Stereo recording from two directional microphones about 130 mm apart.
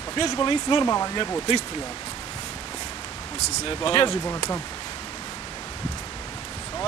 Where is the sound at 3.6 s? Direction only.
45° left (ahead or behind).